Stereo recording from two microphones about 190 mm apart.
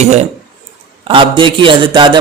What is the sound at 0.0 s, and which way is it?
A man's voice, 35° right (ahead or behind).